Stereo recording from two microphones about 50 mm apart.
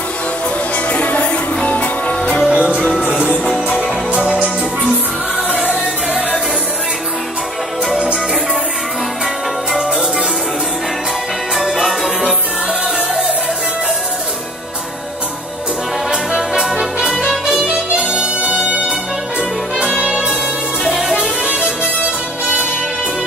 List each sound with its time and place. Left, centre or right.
0.9 s music: left
2.5 s music: right
2.9 s music: centre
4.1 s music: right
11.5 s music: centre
16.1 s brass instrument: centre
17.1 s music: centre
17.6 s music: right
19.8 s music: centre
20.8 s music: centre
21.2 s music: centre